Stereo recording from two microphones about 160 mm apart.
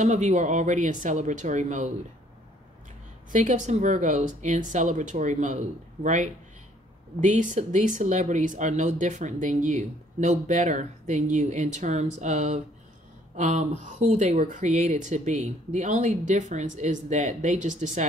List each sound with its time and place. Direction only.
0.0 s speech: 50° right (ahead or behind)
3.3 s speech: 50° right (ahead or behind)